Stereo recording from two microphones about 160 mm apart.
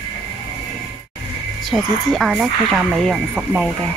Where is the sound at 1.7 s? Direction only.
Centre (ahead or behind).